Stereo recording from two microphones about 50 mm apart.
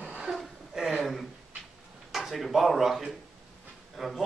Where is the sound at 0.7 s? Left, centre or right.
Centre.